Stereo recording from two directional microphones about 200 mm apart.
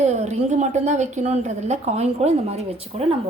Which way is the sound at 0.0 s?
35° right (ahead or behind).